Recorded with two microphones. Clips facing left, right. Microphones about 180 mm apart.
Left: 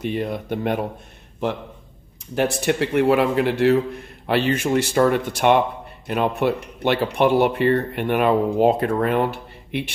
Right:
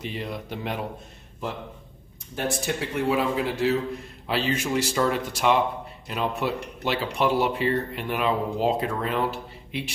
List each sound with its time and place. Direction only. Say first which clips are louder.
0.0 s speech: left 8 dB; 50° left (ahead or behind)
2.6 s speech: left 9 dB; 65° left (ahead or behind)